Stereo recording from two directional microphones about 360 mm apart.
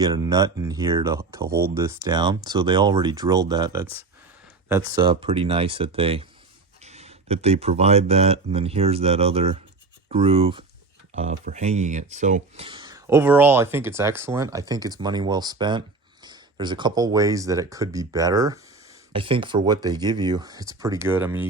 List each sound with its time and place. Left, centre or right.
0.0 s speech: centre